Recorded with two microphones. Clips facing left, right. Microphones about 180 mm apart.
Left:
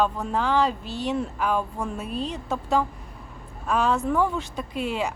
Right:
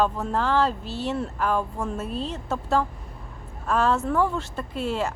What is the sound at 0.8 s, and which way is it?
Speech, 35° right (ahead or behind).